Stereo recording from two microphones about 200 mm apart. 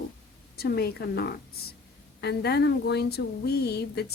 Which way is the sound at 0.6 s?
50° left (ahead or behind).